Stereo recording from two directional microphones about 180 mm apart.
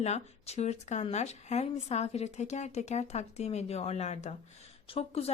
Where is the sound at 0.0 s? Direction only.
35° left (ahead or behind).